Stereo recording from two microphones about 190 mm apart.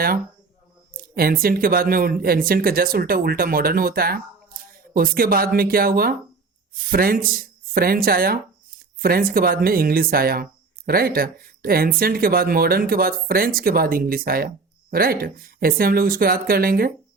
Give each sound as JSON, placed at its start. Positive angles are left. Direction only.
{"t": 0.9, "sound": "speech", "side_deg": -50}